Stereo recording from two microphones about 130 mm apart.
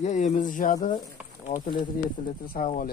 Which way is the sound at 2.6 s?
90° left.